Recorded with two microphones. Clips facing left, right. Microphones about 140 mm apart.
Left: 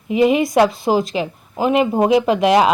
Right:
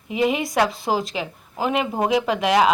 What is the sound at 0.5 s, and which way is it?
A woman's voice, 20° left (ahead or behind).